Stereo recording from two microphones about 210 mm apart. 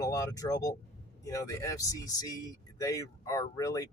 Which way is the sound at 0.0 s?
15° left (ahead or behind).